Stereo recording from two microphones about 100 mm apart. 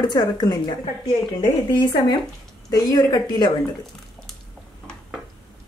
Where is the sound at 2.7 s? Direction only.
40° left (ahead or behind).